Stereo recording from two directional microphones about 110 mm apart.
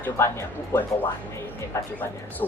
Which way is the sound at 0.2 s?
25° left (ahead or behind).